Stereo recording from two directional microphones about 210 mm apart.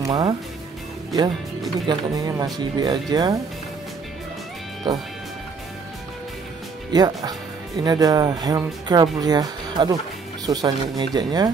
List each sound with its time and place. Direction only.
0.0 s speech: 20° right (ahead or behind)
1.9 s speech: 20° right (ahead or behind)
4.9 s speech: 20° right (ahead or behind)
6.9 s speech: 20° right (ahead or behind)